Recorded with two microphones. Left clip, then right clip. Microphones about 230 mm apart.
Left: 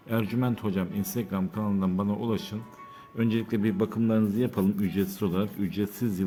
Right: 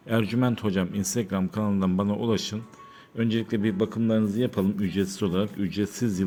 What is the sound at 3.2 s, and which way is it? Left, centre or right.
A man's voice, centre.